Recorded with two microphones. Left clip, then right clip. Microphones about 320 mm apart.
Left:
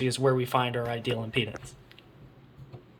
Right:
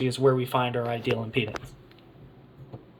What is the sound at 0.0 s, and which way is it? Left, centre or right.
Speech, centre.